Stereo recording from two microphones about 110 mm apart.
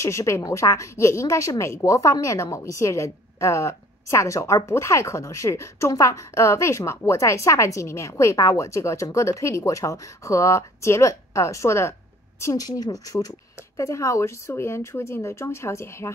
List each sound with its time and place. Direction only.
0.0 s speech: 25° left (ahead or behind)